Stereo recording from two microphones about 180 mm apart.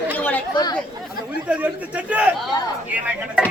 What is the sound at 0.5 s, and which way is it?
Speech, 25° left (ahead or behind).